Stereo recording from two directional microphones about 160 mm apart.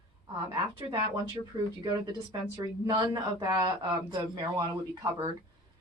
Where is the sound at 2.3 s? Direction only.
25° right (ahead or behind).